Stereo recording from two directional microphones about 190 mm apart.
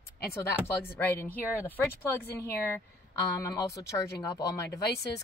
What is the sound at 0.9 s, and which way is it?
Speech, 10° left (ahead or behind).